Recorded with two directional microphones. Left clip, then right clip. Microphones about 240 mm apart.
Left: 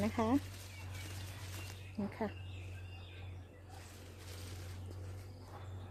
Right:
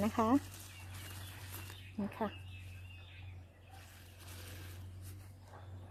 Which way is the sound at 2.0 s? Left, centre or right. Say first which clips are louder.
Even; right.